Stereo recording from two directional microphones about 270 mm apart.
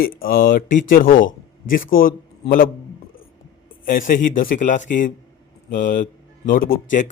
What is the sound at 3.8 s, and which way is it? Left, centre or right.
A man's voice, left.